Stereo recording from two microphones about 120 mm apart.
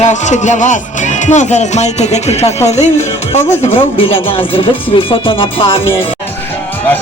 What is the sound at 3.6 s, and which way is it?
Speech, 50° left (ahead or behind).